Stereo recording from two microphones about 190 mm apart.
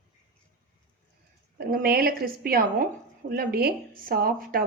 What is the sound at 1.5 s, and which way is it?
A woman's voice, 50° right (ahead or behind).